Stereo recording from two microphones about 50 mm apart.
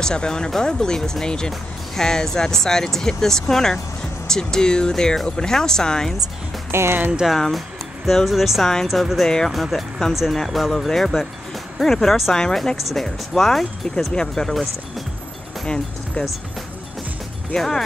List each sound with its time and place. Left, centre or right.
0.0 s speech: centre
6.7 s speech: right
7.3 s speech: centre
15.6 s speech: centre
17.6 s speech: centre